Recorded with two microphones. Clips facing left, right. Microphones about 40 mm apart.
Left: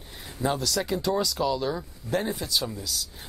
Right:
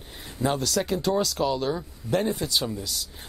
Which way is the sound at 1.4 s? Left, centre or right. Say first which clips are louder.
Right 1 dB; centre.